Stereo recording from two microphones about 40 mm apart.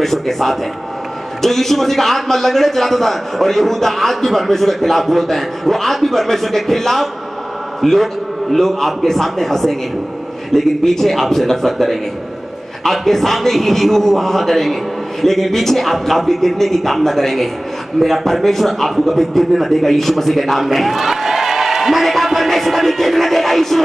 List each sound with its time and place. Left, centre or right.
0.0 s a man's voice: centre